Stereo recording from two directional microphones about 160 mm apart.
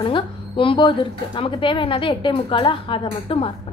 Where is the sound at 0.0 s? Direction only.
30° left (ahead or behind).